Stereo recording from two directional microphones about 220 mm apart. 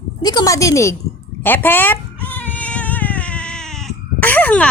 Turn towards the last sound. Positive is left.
turn(degrees=5)  # may be behind; listen again after turning